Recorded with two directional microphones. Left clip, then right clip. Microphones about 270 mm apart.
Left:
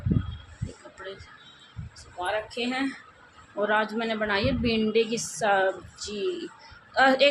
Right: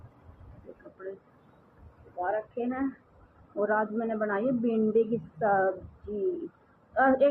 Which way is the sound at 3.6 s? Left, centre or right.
Left.